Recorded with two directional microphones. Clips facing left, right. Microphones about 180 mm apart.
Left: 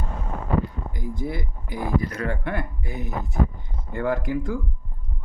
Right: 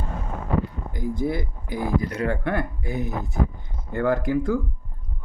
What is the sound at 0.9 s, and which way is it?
Speech, 45° right (ahead or behind).